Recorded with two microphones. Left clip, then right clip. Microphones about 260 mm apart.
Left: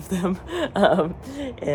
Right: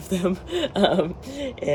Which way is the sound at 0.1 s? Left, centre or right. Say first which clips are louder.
Right 2 dB; centre.